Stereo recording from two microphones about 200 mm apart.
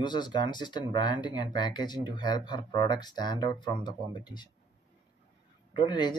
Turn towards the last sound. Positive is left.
turn(degrees=20)  # may be behind; listen again after turning